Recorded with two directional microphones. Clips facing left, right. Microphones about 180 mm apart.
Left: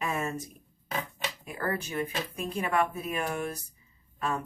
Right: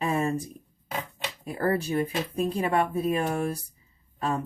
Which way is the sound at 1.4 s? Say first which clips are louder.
Right 8 dB; 30° right (ahead or behind).